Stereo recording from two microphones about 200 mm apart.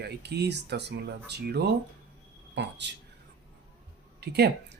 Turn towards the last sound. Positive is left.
turn(degrees=-55)  # may be behind; listen again after turning